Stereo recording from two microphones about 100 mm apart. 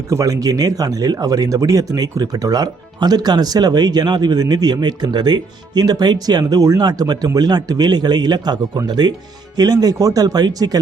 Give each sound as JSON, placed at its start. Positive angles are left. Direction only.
{"t": 0.1, "sound": "speech", "side_deg": -35}